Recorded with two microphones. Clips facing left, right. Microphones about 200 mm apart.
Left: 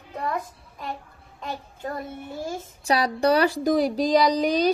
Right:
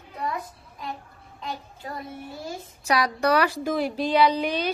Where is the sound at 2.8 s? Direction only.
30° left (ahead or behind).